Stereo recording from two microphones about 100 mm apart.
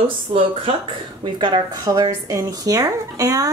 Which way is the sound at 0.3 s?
70° right (ahead or behind).